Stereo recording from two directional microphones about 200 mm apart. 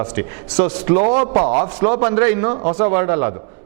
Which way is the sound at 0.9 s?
35° right (ahead or behind).